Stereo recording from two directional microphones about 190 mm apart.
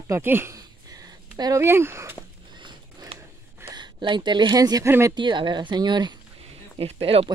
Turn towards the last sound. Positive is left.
turn(degrees=-30)  # may be behind; listen again after turning